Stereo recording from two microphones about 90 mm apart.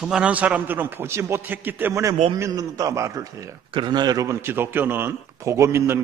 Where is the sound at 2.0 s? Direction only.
40° right (ahead or behind).